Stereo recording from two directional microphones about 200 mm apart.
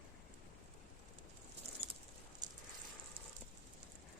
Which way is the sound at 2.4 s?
20° right (ahead or behind).